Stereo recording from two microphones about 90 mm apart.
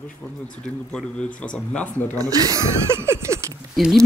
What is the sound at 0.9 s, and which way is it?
Speech, 10° left (ahead or behind).